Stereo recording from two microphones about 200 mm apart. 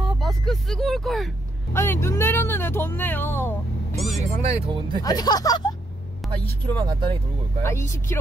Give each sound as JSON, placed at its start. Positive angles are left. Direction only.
{"t": 0.2, "sound": "vehicle", "side_deg": 0}
{"t": 1.7, "sound": "speech", "side_deg": 10}
{"t": 3.9, "sound": "vehicle", "side_deg": 0}
{"t": 4.3, "sound": "speech", "side_deg": -35}
{"t": 5.0, "sound": "speech", "side_deg": 20}
{"t": 6.2, "sound": "vehicle", "side_deg": 0}
{"t": 6.6, "sound": "speech", "side_deg": -20}
{"t": 7.6, "sound": "speech", "side_deg": 15}